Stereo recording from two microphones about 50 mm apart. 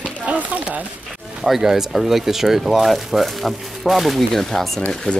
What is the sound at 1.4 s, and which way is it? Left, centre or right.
Speech, centre.